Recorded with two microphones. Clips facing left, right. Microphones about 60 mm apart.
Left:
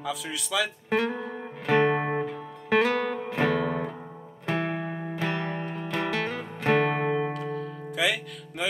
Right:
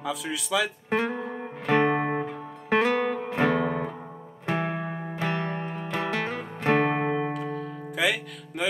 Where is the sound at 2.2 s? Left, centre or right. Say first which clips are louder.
Left 1 dB; centre.